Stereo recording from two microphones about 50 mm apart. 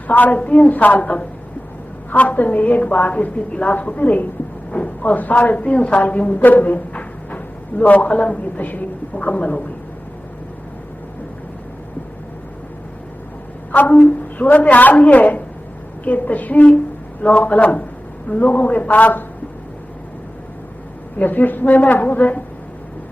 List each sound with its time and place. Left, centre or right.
0.1 s a woman's voice: left
0.3 s a woman's voice: left
13.7 s a woman's voice: left
21.2 s a woman's voice: left